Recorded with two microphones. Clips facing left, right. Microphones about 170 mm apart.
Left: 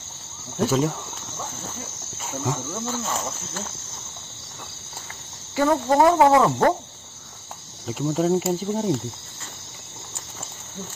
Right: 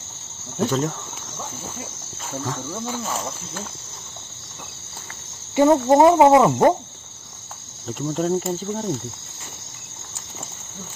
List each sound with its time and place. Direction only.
0.6 s speech: 5° left (ahead or behind)
2.7 s speech: 10° right (ahead or behind)
5.6 s cricket: 20° right (ahead or behind)
7.8 s speech: 5° left (ahead or behind)